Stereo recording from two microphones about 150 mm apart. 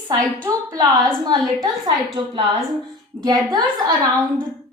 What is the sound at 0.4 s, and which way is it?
A woman's voice, 20° right (ahead or behind).